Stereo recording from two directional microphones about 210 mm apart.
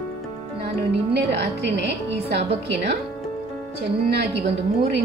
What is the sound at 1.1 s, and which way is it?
A woman's voice, 55° right (ahead or behind).